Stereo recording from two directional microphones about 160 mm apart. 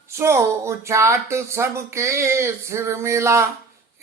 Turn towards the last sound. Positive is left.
turn(degrees=-15)  # may be behind; listen again after turning